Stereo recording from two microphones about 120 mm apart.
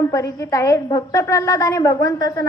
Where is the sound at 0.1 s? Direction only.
25° left (ahead or behind).